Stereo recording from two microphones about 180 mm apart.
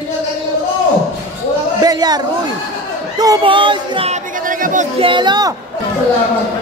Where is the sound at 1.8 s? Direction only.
20° right (ahead or behind).